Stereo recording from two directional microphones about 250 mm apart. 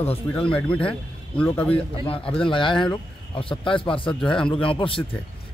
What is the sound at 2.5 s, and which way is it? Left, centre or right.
Speech, centre.